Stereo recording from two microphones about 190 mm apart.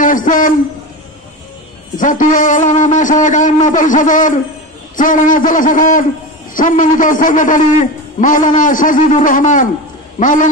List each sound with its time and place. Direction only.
0.0 s a man's voice: 45° left (ahead or behind)
2.0 s a man's voice: 45° left (ahead or behind)